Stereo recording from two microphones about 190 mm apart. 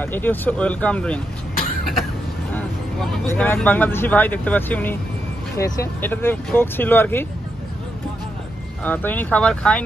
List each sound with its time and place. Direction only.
0.0 s speech: 10° left (ahead or behind)
2.5 s speech: 10° left (ahead or behind)
8.8 s speech: 10° left (ahead or behind)